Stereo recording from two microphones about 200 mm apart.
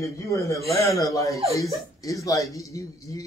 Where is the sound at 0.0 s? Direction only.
15° left (ahead or behind).